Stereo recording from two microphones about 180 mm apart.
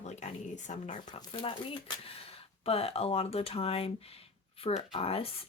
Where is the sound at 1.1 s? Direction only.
30° left (ahead or behind).